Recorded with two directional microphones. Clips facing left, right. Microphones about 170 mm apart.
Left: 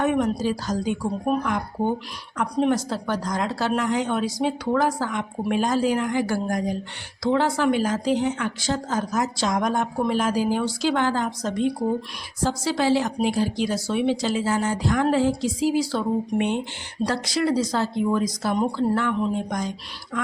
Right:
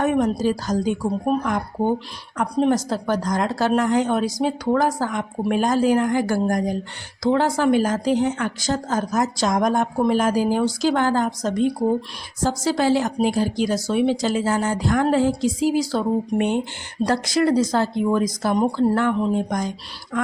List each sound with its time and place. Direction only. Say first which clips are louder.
0.0 s speech: right 2 dB; 45° right (ahead or behind)
2.4 s speech: right 2 dB; 40° right (ahead or behind)